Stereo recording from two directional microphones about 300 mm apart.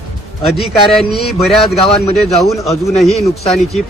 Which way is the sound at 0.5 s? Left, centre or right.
Centre.